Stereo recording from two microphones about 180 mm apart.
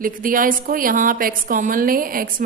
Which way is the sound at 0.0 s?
50° right (ahead or behind).